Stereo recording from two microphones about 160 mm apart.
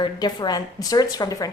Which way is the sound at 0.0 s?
25° left (ahead or behind).